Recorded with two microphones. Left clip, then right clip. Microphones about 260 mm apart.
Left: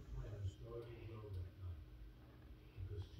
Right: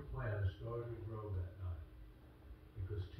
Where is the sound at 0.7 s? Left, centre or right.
Right.